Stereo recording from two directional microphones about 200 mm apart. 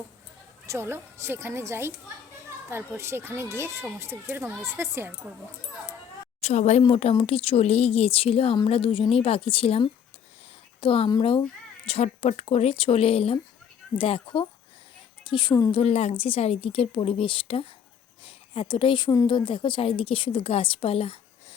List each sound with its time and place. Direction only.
0.7 s speech: 10° right (ahead or behind)
6.4 s a woman's voice: 35° left (ahead or behind)
15.8 s speech: 30° left (ahead or behind)